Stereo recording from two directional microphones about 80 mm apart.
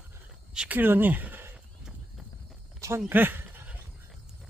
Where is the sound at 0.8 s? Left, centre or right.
Right.